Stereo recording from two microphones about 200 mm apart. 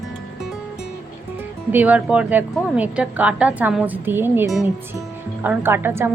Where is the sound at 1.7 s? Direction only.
5° right (ahead or behind).